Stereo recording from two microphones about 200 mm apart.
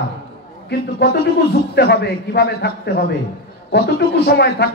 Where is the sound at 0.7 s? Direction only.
55° left (ahead or behind).